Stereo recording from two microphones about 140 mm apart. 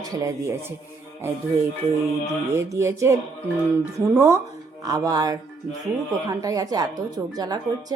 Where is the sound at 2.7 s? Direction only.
20° right (ahead or behind).